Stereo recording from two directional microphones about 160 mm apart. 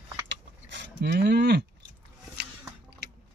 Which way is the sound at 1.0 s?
90° right.